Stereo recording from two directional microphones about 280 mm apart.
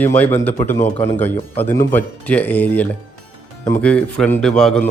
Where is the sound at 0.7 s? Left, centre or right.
Left.